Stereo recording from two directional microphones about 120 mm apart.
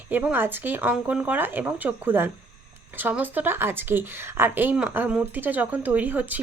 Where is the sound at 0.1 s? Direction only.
10° right (ahead or behind).